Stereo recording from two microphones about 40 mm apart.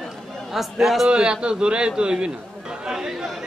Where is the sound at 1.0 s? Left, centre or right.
Right.